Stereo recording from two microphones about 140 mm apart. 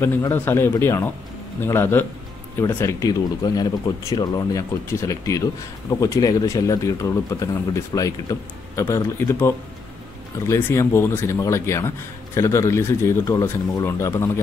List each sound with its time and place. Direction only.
0.3 s speech: 15° left (ahead or behind)